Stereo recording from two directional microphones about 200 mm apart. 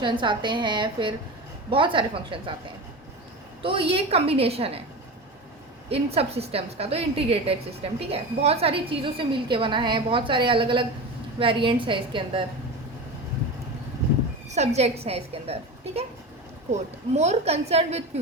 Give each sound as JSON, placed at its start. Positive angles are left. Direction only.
{"t": 0.0, "sound": "a woman's voice", "side_deg": -25}
{"t": 3.6, "sound": "a woman's voice", "side_deg": -25}
{"t": 5.9, "sound": "a woman's voice", "side_deg": -30}
{"t": 14.5, "sound": "a woman's voice", "side_deg": -35}
{"t": 16.7, "sound": "a woman's voice", "side_deg": -35}